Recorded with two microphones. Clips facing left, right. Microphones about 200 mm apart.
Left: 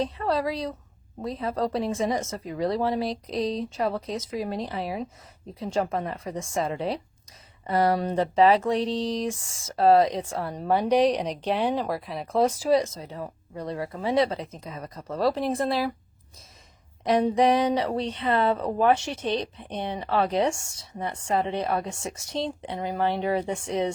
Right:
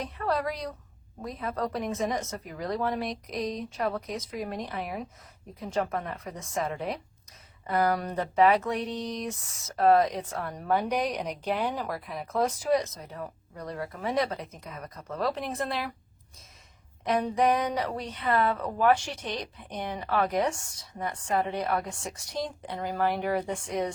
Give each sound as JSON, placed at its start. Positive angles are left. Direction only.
{"t": 0.0, "sound": "speech", "side_deg": 30}
{"t": 17.0, "sound": "speech", "side_deg": 35}